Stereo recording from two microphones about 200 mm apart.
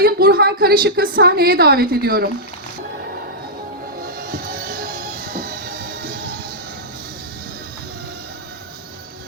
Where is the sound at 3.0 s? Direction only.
50° right (ahead or behind).